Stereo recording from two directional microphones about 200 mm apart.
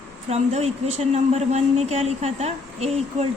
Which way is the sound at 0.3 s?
35° right (ahead or behind).